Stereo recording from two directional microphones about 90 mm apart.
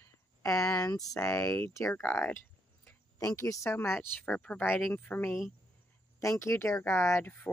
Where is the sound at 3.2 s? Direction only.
35° left (ahead or behind); by 5.2 s 15° left (ahead or behind).